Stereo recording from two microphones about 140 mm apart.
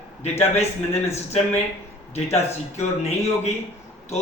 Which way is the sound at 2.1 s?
50° left (ahead or behind).